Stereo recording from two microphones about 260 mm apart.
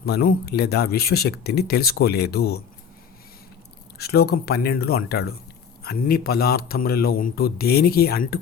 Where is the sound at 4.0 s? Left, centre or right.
Left.